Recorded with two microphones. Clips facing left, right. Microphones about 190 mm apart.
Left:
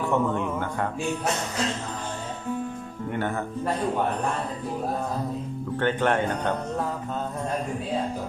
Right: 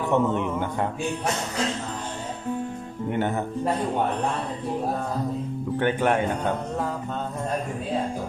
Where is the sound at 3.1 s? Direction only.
20° right (ahead or behind).